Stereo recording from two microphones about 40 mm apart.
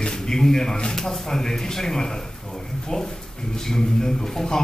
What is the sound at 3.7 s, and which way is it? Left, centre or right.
Speech, centre.